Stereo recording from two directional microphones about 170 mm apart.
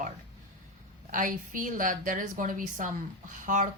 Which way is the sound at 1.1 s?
50° right (ahead or behind).